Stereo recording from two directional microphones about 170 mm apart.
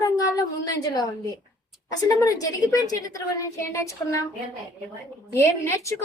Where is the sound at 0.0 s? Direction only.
20° left (ahead or behind).